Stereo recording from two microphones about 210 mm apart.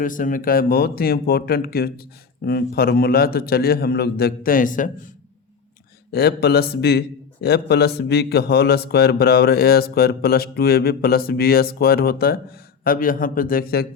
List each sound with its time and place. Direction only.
0.0 s a man's voice: 40° left (ahead or behind)
6.1 s a man's voice: 50° left (ahead or behind)